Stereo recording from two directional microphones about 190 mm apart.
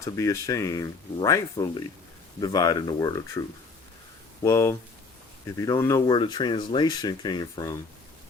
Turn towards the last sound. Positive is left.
turn(degrees=20)  # may be behind; listen again after turning